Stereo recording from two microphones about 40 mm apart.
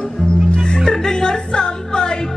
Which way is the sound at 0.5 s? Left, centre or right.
Left.